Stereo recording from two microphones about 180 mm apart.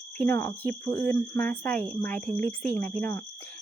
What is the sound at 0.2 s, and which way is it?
Speech, 15° left (ahead or behind).